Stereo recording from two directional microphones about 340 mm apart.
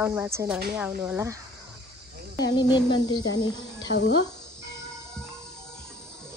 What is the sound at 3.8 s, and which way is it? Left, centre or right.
Speech, left.